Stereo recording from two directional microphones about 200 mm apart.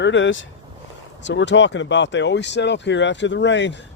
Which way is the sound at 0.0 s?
65° left (ahead or behind).